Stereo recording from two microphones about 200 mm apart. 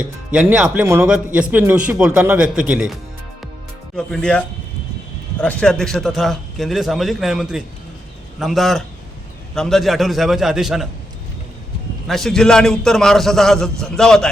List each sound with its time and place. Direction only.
0.3 s a man's voice: 5° right (ahead or behind)
12.0 s a man's voice: centre (ahead or behind)